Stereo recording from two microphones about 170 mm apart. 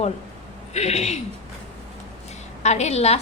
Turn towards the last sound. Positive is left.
turn(degrees=40)  # may be behind; listen again after turning